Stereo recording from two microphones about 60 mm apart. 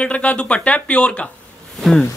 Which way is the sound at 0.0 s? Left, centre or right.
Left.